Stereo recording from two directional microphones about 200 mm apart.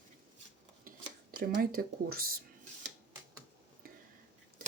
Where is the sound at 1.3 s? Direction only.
45° right (ahead or behind).